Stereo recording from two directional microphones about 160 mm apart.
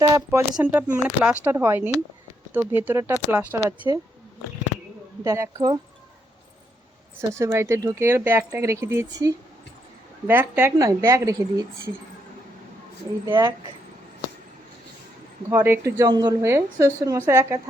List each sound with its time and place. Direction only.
0.0 s a woman's voice: 20° right (ahead or behind)
5.2 s a woman's voice: 20° right (ahead or behind)
7.2 s a woman's voice: 15° right (ahead or behind)
15.4 s a woman's voice: 15° right (ahead or behind)